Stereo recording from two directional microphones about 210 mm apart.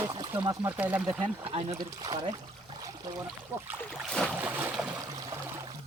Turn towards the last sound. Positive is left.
turn(degrees=-15)  # may be behind; listen again after turning